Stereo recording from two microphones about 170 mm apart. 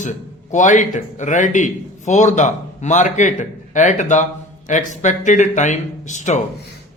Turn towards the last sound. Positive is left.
turn(degrees=45)  # may be behind; listen again after turning